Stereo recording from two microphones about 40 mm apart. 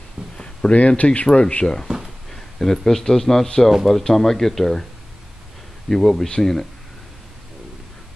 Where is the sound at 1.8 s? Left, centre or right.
Centre.